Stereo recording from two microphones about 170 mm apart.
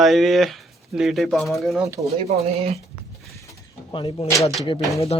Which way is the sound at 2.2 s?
35° right (ahead or behind).